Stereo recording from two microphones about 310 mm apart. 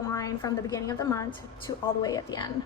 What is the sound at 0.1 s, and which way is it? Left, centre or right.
A woman's voice, centre.